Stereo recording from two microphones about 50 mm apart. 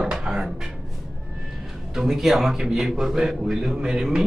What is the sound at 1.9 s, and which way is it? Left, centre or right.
Speech, centre.